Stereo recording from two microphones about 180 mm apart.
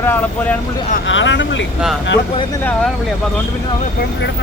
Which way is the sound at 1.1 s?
90° left.